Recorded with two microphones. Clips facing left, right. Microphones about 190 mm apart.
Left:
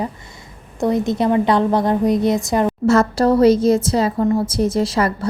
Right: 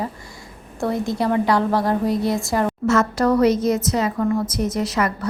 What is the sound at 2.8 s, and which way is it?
A woman's voice, 30° left (ahead or behind).